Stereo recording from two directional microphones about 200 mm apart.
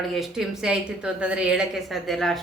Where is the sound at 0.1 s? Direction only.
Centre (ahead or behind).